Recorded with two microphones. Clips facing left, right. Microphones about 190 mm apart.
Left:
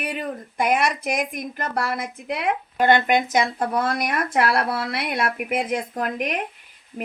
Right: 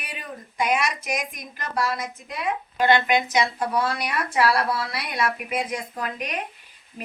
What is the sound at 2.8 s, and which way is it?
Speech, 50° left (ahead or behind).